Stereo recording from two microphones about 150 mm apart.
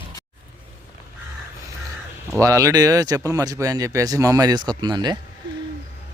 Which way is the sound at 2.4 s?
20° right (ahead or behind).